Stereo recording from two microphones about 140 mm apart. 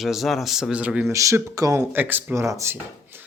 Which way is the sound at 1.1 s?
20° right (ahead or behind).